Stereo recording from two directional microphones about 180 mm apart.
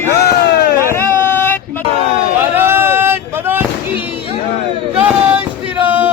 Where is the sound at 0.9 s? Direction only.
10° left (ahead or behind).